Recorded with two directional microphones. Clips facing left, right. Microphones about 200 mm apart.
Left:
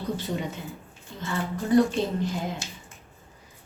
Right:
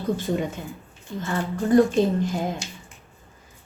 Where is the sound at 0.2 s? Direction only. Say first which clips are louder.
Right 5 dB; 50° right (ahead or behind).